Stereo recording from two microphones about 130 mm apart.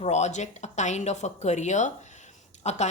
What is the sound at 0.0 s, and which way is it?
A woman's voice, 60° left (ahead or behind).